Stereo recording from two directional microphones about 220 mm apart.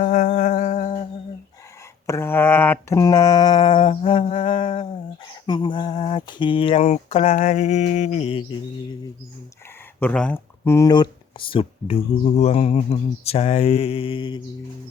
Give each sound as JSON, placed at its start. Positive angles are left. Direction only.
{"t": 0.0, "sound": "insect", "side_deg": 35}
{"t": 2.0, "sound": "a sound", "side_deg": 10}
{"t": 5.5, "sound": "speech", "side_deg": 20}
{"t": 10.0, "sound": "speech", "side_deg": 5}